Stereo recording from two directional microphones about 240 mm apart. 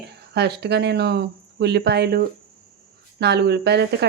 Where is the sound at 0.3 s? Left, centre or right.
Right.